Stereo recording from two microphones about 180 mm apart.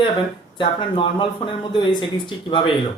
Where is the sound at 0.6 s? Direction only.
30° left (ahead or behind).